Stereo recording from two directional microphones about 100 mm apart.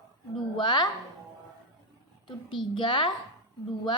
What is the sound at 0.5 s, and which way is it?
Speech, 50° left (ahead or behind).